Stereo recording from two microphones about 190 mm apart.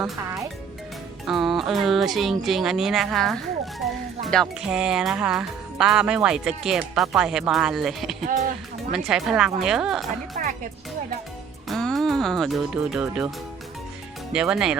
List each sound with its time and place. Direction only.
1.3 s speech: centre (ahead or behind)
8.3 s speech: 45° right (ahead or behind)
9.0 s speech: 5° right (ahead or behind)
10.4 s music: 45° right (ahead or behind)
11.7 s speech: centre (ahead or behind)
14.3 s speech: 5° right (ahead or behind)